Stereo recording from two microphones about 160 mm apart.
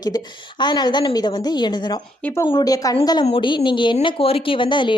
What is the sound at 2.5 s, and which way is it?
A woman's voice, 25° left (ahead or behind).